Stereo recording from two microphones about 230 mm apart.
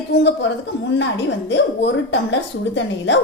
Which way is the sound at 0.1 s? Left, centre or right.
Left.